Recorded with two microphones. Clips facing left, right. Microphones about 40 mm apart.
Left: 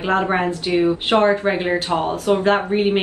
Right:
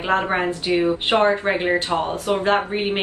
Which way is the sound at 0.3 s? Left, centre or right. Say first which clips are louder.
Left 1 dB; centre.